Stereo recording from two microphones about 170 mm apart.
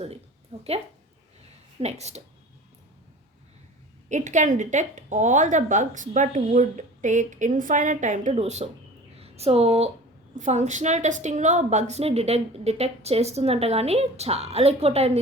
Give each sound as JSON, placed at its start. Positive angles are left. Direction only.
{"t": 0.5, "sound": "a sound", "side_deg": -35}
{"t": 1.8, "sound": "a woman's voice", "side_deg": -40}
{"t": 4.1, "sound": "a woman's voice", "side_deg": -45}